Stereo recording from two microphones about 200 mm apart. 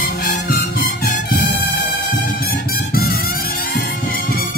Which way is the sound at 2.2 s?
45° left (ahead or behind).